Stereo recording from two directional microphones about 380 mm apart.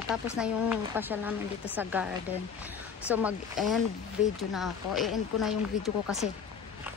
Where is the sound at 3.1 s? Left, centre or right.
Centre.